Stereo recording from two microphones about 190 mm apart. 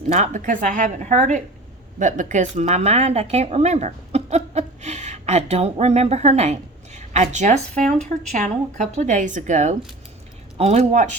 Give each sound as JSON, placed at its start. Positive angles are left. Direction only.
{"t": 0.1, "sound": "speech", "side_deg": -40}